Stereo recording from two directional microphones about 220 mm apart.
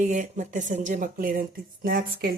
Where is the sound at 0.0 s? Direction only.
35° right (ahead or behind).